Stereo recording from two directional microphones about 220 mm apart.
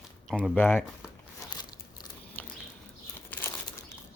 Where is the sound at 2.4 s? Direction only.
10° left (ahead or behind).